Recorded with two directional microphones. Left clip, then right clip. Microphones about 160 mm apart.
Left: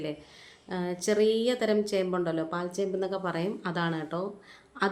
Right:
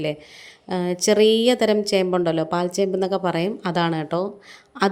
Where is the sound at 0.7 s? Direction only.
40° right (ahead or behind).